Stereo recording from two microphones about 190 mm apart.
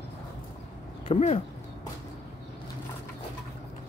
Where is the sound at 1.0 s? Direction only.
35° left (ahead or behind).